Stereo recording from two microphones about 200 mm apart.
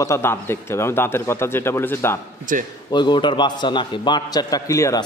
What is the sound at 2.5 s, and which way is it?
Speech, 40° right (ahead or behind).